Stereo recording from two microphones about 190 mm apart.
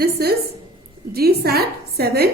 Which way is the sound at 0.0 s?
55° right (ahead or behind).